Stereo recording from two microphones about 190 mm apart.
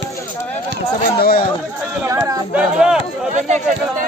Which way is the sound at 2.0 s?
15° right (ahead or behind).